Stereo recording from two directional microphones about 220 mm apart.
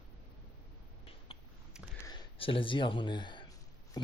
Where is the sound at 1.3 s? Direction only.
25° left (ahead or behind).